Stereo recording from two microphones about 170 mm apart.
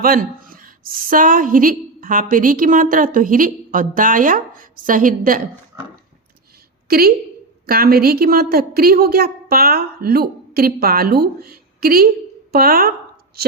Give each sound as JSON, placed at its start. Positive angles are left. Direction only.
{"t": 0.0, "sound": "a woman's voice", "side_deg": -55}
{"t": 6.8, "sound": "a woman's voice", "side_deg": -65}